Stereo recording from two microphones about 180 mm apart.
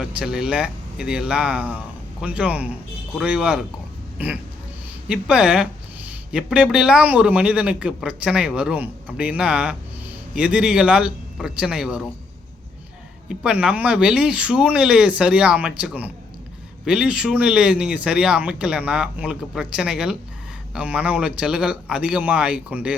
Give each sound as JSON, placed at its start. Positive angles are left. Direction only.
{"t": 0.0, "sound": "a man's voice", "side_deg": -5}
{"t": 13.2, "sound": "speech", "side_deg": -5}